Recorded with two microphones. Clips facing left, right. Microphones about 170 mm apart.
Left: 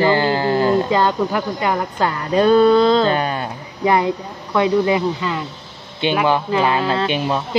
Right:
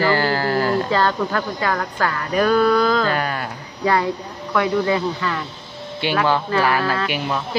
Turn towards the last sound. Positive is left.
turn(degrees=25)  # may be behind; listen again after turning